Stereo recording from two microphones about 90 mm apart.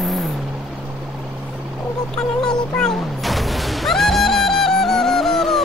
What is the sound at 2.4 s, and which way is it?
Music, 5° left (ahead or behind).